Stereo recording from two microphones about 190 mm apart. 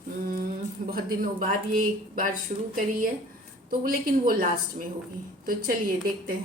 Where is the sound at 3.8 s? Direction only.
50° right (ahead or behind).